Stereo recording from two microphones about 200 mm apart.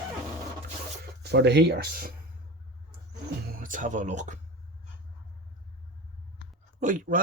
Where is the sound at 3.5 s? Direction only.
45° right (ahead or behind).